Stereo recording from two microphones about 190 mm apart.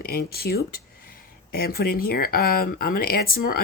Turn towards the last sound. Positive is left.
turn(degrees=50)  # may be behind; listen again after turning